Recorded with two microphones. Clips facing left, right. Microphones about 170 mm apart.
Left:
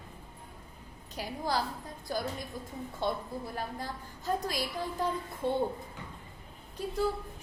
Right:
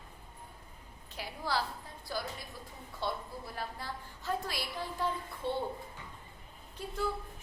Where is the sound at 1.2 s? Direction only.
40° left (ahead or behind).